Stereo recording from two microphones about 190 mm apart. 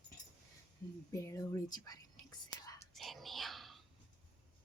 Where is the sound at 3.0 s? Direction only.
Centre (ahead or behind).